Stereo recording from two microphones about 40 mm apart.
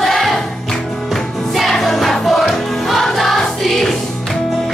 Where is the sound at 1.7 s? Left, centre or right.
Centre.